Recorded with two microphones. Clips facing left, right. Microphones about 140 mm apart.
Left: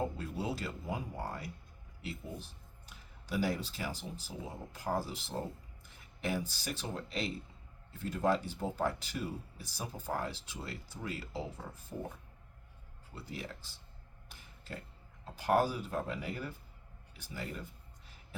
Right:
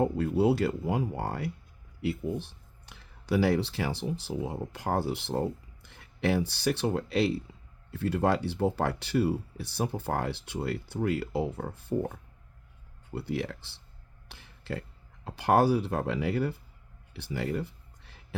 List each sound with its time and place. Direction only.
0.0 s speech: 65° right (ahead or behind)
13.1 s speech: 70° right (ahead or behind)
17.2 s a sound: 75° right (ahead or behind)